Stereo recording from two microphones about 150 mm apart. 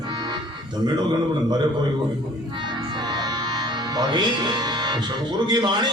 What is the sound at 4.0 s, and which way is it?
A man's voice, 30° right (ahead or behind).